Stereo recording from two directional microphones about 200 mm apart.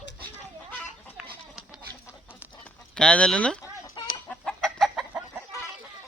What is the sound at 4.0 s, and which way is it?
Chicken, 25° left (ahead or behind).